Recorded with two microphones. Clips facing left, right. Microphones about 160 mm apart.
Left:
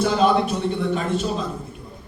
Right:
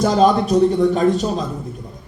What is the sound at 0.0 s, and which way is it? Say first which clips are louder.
A man's voice: right 4 dB; 40° right (ahead or behind).